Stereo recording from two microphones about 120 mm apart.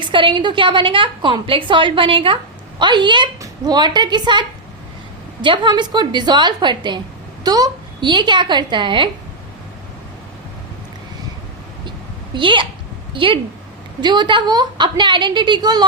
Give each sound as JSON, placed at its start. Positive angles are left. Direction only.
{"t": 0.0, "sound": "a woman's voice", "side_deg": -45}
{"t": 12.3, "sound": "a woman's voice", "side_deg": -45}